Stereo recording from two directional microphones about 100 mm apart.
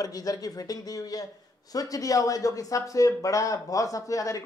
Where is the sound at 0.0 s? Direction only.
40° left (ahead or behind).